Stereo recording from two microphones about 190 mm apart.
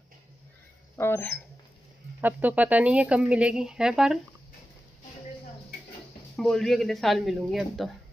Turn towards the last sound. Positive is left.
turn(degrees=0)  # may be behind; listen again after turning